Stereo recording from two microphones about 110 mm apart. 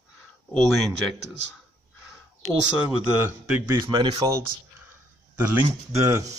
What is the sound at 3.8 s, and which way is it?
Speech, 50° right (ahead or behind).